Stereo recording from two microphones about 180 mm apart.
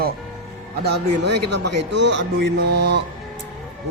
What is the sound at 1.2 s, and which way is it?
Speech, 70° right (ahead or behind).